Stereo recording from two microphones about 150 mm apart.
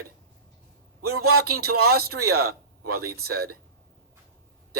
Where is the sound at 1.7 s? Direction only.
90° right.